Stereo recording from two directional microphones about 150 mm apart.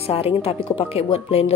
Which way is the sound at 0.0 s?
40° left (ahead or behind).